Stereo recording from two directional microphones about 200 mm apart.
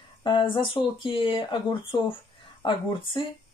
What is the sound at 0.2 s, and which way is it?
Speech, 25° left (ahead or behind).